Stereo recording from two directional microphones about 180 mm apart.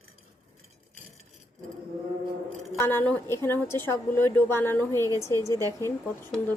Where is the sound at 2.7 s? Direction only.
10° left (ahead or behind).